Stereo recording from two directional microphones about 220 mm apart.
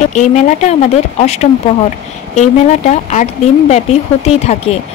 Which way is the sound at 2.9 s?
30° left (ahead or behind).